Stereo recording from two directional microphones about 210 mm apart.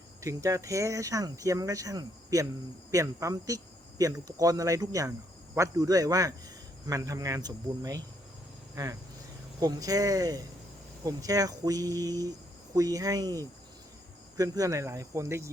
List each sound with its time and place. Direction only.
0.2 s speech: 15° right (ahead or behind)